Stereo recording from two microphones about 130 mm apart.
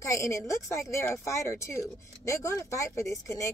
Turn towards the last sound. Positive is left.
turn(degrees=20)  # may be behind; listen again after turning